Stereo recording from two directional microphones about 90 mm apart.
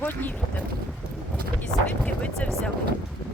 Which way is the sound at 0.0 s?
20° left (ahead or behind).